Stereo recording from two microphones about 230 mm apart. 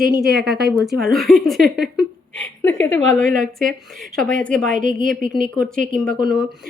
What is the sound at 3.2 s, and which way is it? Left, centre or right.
Speech, right.